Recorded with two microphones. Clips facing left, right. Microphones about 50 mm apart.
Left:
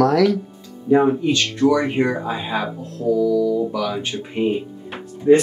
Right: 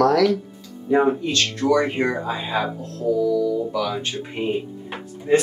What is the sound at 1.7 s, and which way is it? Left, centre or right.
Speech, centre.